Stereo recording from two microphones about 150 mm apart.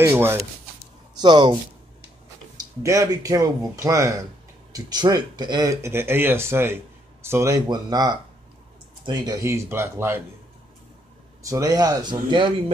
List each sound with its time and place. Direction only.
0.0 s speech: 15° right (ahead or behind)
1.2 s speech: 30° right (ahead or behind)
11.4 s speech: 25° right (ahead or behind)